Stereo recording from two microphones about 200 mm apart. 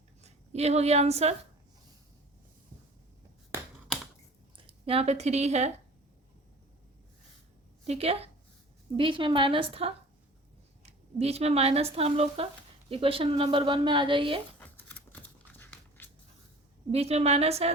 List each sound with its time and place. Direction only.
0.2 s a woman's voice: 35° right (ahead or behind)
4.5 s speech: 25° right (ahead or behind)
7.9 s speech: 30° right (ahead or behind)
14.6 s a sound: 10° left (ahead or behind)
16.9 s speech: 30° right (ahead or behind)